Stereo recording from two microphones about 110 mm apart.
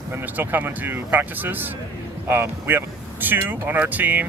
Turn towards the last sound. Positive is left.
turn(degrees=-15)  # may be behind; listen again after turning